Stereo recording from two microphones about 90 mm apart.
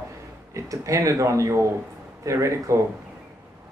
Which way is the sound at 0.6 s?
35° right (ahead or behind).